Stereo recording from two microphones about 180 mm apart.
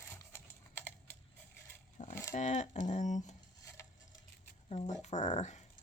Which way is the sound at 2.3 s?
40° left (ahead or behind).